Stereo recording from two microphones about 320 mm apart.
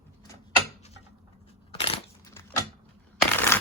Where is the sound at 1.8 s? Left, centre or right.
Centre.